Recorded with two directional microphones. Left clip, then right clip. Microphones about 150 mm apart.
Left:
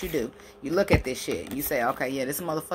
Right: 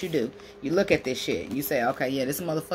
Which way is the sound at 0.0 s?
20° right (ahead or behind).